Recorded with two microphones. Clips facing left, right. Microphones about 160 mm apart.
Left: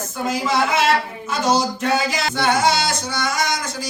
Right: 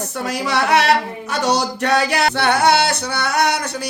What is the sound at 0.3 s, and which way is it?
Singing, 70° right (ahead or behind).